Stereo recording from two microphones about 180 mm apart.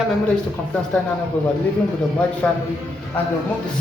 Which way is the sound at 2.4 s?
5° left (ahead or behind).